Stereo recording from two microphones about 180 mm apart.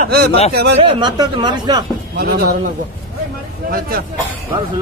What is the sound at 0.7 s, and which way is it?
Speech, 30° right (ahead or behind).